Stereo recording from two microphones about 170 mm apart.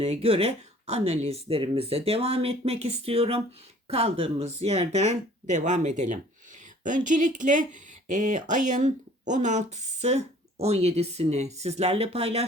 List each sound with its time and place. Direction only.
0.0 s speech: 35° right (ahead or behind)